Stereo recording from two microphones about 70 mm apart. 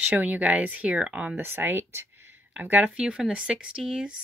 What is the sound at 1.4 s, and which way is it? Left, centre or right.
Speech, right.